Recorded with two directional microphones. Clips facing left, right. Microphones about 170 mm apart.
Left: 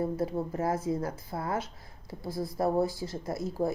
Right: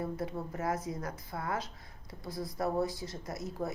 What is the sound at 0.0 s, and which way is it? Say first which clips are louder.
Speech: left 6 dB; 30° left (ahead or behind).